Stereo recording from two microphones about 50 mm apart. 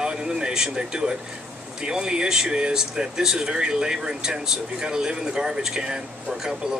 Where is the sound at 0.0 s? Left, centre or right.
Centre.